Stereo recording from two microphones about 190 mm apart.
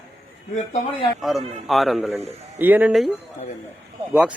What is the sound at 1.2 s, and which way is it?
A man's voice, centre (ahead or behind).